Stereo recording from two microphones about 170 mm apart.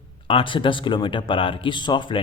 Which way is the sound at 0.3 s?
30° left (ahead or behind).